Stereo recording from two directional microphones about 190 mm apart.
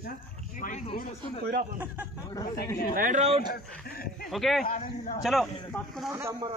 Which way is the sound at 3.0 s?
40° right (ahead or behind).